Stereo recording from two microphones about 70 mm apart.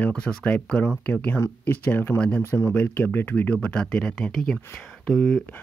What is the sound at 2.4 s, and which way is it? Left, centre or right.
Speech, left.